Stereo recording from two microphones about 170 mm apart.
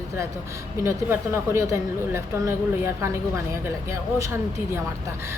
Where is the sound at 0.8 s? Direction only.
15° right (ahead or behind).